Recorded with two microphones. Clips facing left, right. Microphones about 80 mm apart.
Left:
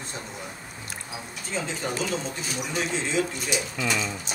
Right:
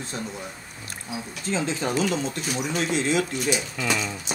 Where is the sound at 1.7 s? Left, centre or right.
Right.